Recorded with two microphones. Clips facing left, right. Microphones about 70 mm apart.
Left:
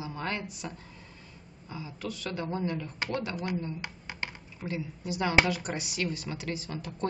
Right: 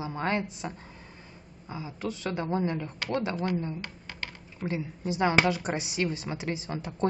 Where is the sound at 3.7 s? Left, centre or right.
Centre.